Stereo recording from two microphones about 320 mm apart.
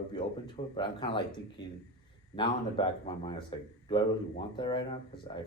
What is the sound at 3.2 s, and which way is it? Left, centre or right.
Speech, centre.